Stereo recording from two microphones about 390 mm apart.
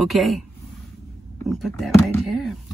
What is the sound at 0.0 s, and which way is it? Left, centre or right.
Speech, centre.